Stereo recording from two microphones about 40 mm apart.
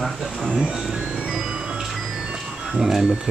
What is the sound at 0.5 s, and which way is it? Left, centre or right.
Speech, right.